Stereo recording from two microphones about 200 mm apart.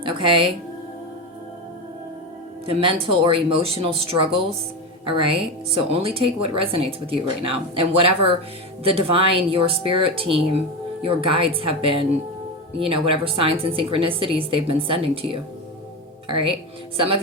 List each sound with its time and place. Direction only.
0.0 s speech: 25° right (ahead or behind)
2.6 s speech: 25° right (ahead or behind)